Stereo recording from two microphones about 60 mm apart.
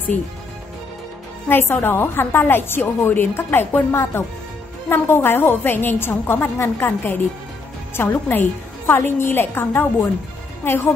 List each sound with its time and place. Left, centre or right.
1.5 s a woman's voice: left